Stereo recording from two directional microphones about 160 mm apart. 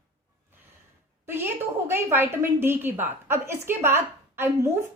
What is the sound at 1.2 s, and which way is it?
A woman's voice, 15° right (ahead or behind).